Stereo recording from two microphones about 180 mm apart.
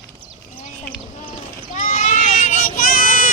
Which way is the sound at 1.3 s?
45° left (ahead or behind).